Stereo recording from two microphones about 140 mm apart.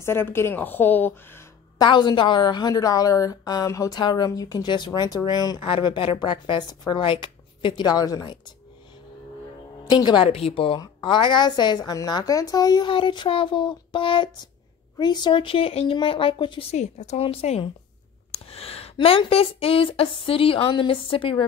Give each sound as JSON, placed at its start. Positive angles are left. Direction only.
{"t": 0.0, "sound": "speech", "side_deg": 15}
{"t": 1.8, "sound": "a woman's voice", "side_deg": 30}
{"t": 9.8, "sound": "a woman's voice", "side_deg": 30}
{"t": 16.7, "sound": "a woman's voice", "side_deg": 55}